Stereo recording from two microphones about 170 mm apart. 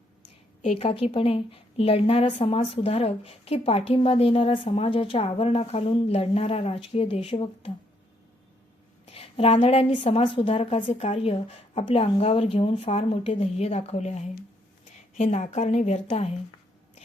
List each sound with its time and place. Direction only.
0.6 s a woman's voice: 35° left (ahead or behind)
9.0 s a woman's voice: 35° left (ahead or behind)